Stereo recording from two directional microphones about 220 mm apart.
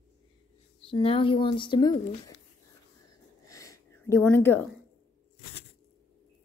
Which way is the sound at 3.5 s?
15° left (ahead or behind).